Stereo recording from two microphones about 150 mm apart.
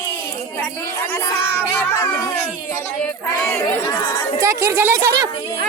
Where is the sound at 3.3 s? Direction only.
15° left (ahead or behind).